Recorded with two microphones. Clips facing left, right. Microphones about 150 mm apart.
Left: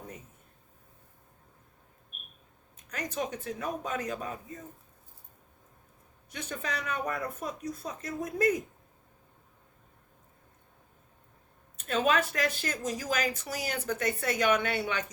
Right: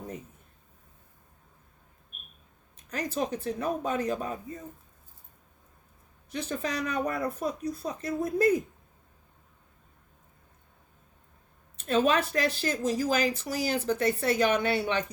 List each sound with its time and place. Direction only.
2.9 s speech: 30° right (ahead or behind)
6.3 s speech: 35° right (ahead or behind)
11.8 s speech: 30° right (ahead or behind)